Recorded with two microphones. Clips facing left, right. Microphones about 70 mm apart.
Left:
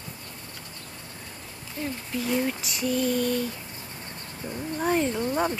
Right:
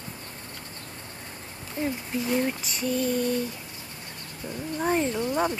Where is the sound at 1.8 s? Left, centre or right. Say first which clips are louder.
Right 4 dB; right.